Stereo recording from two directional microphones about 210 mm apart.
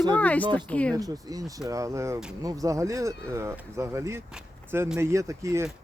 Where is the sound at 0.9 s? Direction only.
15° right (ahead or behind).